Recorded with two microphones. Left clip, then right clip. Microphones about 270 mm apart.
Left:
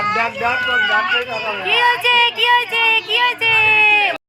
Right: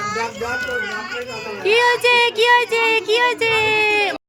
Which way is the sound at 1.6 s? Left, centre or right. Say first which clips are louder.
Even; centre.